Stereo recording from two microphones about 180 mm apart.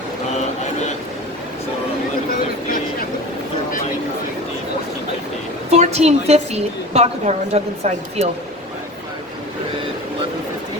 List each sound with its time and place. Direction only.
5.7 s a woman's voice: 40° right (ahead or behind)